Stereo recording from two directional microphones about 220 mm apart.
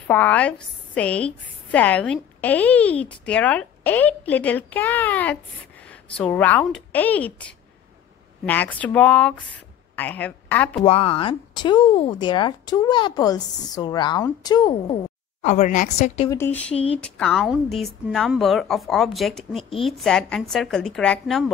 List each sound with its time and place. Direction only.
0.1 s a woman's voice: 5° left (ahead or behind)
10.8 s a woman's voice: 25° left (ahead or behind)
15.4 s a woman's voice: 35° left (ahead or behind)
16.3 s a woman's voice: 10° left (ahead or behind)